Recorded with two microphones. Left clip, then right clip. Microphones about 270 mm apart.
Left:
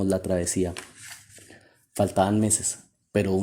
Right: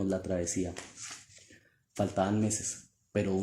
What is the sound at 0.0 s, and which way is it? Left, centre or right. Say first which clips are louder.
Speech: left 7 dB; left.